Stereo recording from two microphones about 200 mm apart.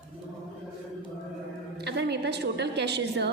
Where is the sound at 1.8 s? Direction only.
55° right (ahead or behind).